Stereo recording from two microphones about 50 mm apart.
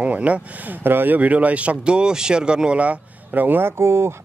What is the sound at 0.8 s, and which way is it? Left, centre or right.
Speech, right.